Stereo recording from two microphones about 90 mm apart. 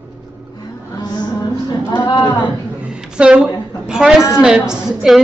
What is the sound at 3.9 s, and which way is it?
A man's voice, 5° right (ahead or behind).